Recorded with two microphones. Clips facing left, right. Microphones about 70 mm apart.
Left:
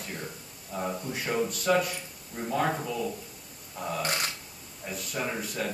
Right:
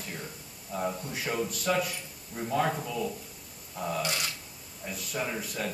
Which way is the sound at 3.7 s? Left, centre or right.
Centre.